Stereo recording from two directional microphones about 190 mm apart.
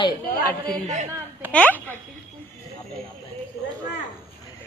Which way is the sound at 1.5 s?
10° left (ahead or behind).